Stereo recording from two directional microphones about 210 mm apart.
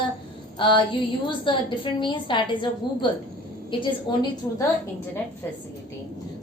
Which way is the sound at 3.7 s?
25° left (ahead or behind).